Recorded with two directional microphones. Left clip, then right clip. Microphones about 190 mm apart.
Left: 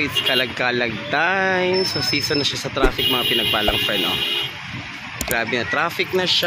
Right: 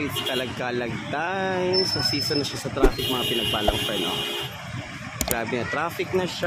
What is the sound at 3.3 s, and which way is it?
Speech, 20° left (ahead or behind).